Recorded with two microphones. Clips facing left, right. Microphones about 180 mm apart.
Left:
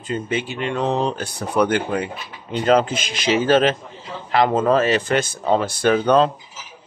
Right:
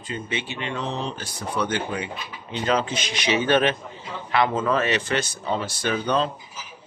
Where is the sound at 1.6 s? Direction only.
60° left (ahead or behind).